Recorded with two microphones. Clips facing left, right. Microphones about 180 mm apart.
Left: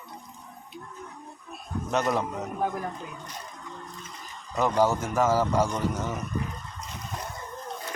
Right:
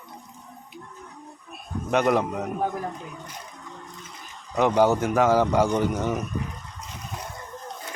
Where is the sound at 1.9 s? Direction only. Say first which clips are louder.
Right 5 dB; 60° right (ahead or behind).